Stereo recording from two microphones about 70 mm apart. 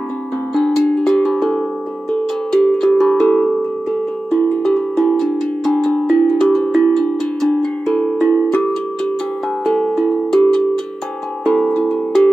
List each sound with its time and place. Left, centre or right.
0.6 s music: centre
2.5 s cowbell: centre
4.3 s music: centre
6.1 s music: centre
6.7 s cowbell: centre
7.9 s music: centre
8.5 s music: centre
9.7 s music: centre